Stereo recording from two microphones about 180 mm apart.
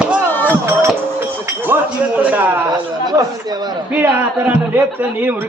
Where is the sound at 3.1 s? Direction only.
20° right (ahead or behind).